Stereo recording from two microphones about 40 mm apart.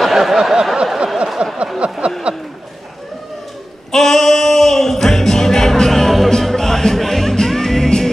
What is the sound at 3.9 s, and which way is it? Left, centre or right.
Music, centre.